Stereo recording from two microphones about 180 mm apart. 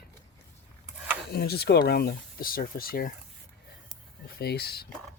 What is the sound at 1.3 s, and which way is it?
Speech, 60° left (ahead or behind).